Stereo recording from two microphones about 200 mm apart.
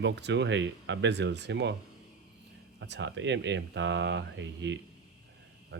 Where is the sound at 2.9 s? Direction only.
60° right (ahead or behind).